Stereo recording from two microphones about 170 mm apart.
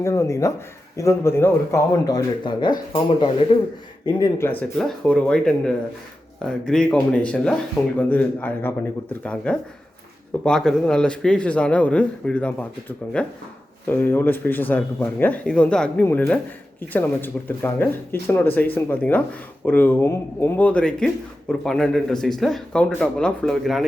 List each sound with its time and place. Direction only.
0.0 s speech: 15° left (ahead or behind); by 3.4 s 35° left (ahead or behind)
4.0 s speech: 15° left (ahead or behind); by 23.8 s centre (ahead or behind)